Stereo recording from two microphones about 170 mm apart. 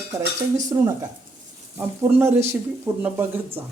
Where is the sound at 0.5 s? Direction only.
20° right (ahead or behind).